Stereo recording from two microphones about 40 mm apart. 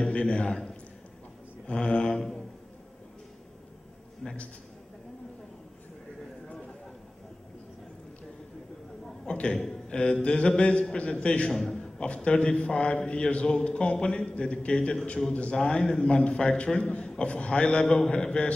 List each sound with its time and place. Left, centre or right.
0.0 s a man's voice: left
1.7 s a man's voice: left
4.2 s a man's voice: centre
9.2 s a man's voice: left
11.5 s a man's voice: centre
16.8 s a man's voice: left